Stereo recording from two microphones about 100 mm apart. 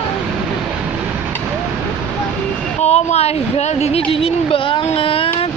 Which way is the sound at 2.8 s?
90° left.